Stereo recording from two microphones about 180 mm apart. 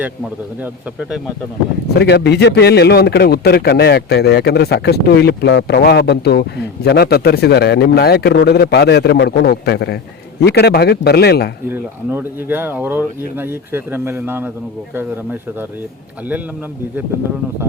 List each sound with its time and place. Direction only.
0.6 s speech: 5° right (ahead or behind)
1.9 s a man's voice: 65° left (ahead or behind)
11.7 s speech: 10° right (ahead or behind)